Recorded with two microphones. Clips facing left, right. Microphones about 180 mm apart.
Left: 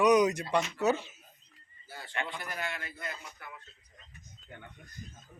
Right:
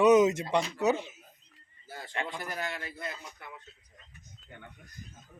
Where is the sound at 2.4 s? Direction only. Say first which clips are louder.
Right 2 dB; 35° right (ahead or behind).